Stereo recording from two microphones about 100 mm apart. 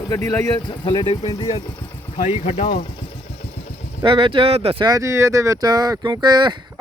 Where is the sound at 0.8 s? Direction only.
55° left (ahead or behind).